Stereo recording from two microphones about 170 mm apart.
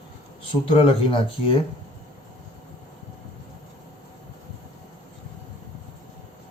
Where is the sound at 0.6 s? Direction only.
30° left (ahead or behind).